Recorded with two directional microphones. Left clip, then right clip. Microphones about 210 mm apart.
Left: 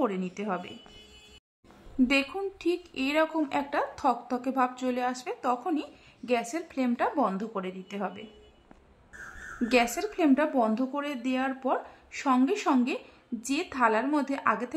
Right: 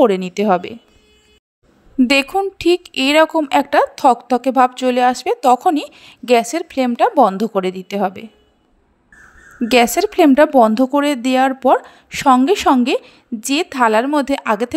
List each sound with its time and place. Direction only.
0.0 s a woman's voice: 40° right (ahead or behind)
2.0 s a woman's voice: 40° right (ahead or behind)
9.7 s a woman's voice: 40° right (ahead or behind)